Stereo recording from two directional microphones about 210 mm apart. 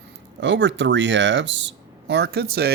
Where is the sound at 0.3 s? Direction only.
60° right (ahead or behind).